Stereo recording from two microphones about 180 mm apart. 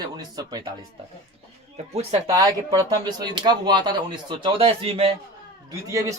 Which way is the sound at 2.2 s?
20° right (ahead or behind).